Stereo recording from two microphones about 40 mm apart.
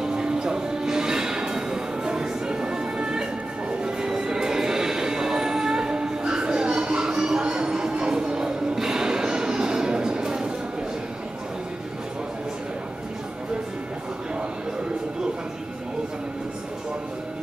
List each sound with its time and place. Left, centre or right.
0.0 s music: centre